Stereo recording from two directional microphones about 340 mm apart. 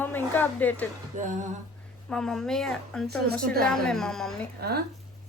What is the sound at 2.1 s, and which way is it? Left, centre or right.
Speech, centre.